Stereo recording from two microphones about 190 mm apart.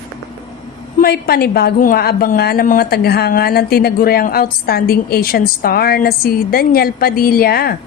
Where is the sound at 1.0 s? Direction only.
55° left (ahead or behind).